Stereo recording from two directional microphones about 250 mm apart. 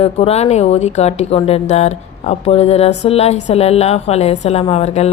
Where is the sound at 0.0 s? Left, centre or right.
Left.